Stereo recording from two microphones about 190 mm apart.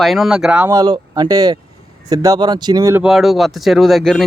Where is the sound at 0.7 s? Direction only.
20° right (ahead or behind).